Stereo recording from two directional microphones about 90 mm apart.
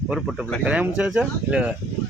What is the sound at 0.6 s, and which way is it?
Speech, 15° right (ahead or behind).